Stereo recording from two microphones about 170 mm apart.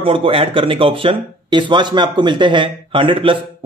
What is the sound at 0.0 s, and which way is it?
Speech, 30° right (ahead or behind).